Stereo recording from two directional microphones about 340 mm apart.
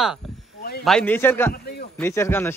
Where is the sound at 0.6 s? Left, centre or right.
Left.